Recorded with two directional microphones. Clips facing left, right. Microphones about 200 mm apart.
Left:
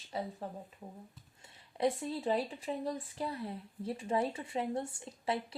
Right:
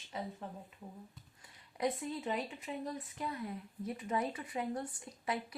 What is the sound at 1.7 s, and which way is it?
Speech, 30° left (ahead or behind).